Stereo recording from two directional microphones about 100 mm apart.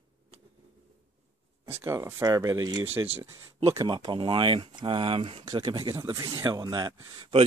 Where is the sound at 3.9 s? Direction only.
50° right (ahead or behind); by 5.5 s 65° right (ahead or behind).